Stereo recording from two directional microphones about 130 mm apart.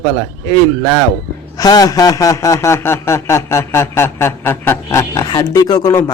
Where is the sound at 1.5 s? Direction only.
30° left (ahead or behind).